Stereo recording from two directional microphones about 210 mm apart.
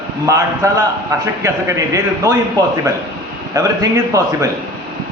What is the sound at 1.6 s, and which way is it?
Speech, 15° right (ahead or behind).